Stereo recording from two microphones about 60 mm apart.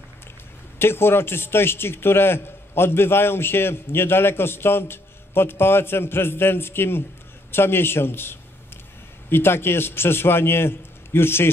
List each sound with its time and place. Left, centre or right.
0.7 s a man's voice: left